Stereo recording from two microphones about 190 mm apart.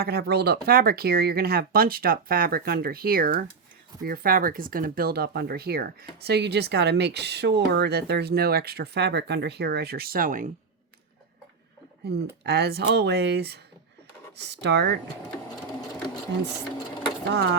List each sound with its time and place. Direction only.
0.0 s speech: 55° right (ahead or behind)
12.0 s speech: 60° right (ahead or behind)
17.2 s speech: 60° right (ahead or behind)